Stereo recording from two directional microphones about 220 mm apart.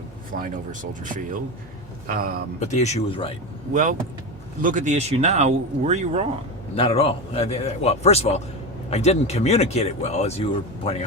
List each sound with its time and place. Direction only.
0.3 s speech: 35° right (ahead or behind)
2.6 s speech: 30° left (ahead or behind)
3.7 s speech: 35° right (ahead or behind)
6.7 s speech: 25° left (ahead or behind)